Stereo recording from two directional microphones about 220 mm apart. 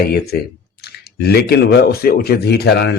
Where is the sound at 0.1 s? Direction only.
45° left (ahead or behind).